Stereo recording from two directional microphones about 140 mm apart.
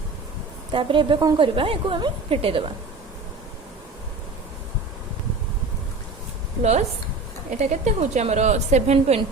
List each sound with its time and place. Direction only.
0.7 s a woman's voice: 40° right (ahead or behind)
6.6 s a woman's voice: 50° right (ahead or behind)